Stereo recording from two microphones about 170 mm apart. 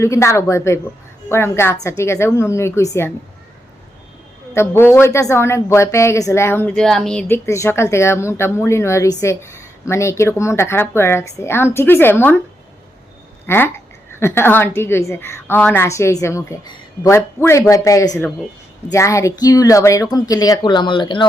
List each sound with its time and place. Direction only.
0.0 s a woman's voice: 15° left (ahead or behind)
4.5 s a woman's voice: 15° left (ahead or behind)
13.5 s a woman's voice: 15° left (ahead or behind); by 21.2 s 30° left (ahead or behind)